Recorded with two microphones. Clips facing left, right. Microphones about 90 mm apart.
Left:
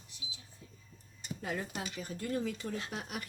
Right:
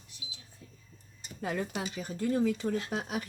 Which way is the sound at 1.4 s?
85° right.